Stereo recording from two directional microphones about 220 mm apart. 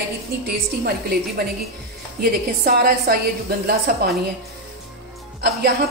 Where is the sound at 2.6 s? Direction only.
45° right (ahead or behind).